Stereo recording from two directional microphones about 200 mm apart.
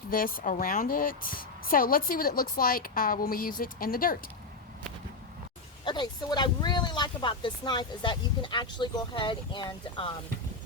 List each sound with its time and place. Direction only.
0.1 s a woman's voice: 45° left (ahead or behind)
5.8 s speech: 20° left (ahead or behind)